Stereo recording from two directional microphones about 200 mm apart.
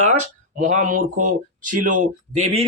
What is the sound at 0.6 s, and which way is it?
Speech, 40° right (ahead or behind).